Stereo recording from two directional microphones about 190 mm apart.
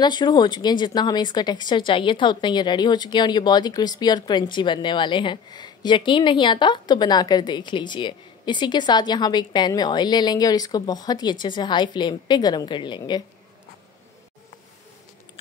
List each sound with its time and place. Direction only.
0.0 s speech: 20° left (ahead or behind)